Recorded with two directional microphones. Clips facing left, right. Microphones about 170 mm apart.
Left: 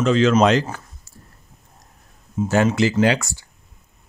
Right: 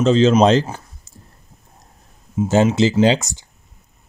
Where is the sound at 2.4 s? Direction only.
10° right (ahead or behind).